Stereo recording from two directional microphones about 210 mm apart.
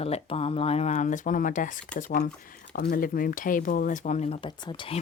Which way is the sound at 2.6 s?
55° left (ahead or behind).